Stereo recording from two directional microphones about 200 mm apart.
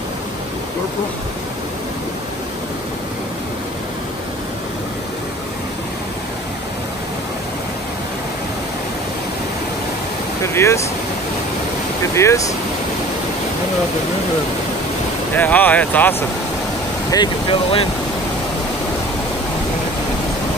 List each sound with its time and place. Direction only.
10.4 s vehicle: 15° left (ahead or behind)
12.2 s speech: 15° left (ahead or behind)
15.3 s speech: 10° left (ahead or behind)
17.1 s speech: 25° left (ahead or behind)